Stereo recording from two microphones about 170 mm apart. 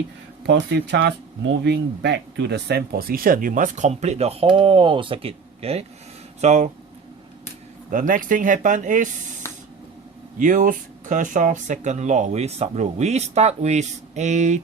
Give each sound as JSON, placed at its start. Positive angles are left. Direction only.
{"t": 0.4, "sound": "speech", "side_deg": -90}
{"t": 7.9, "sound": "speech", "side_deg": -50}
{"t": 10.3, "sound": "speech", "side_deg": -50}